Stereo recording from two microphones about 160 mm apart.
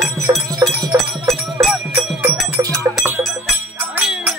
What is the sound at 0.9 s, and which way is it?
Music, centre (ahead or behind).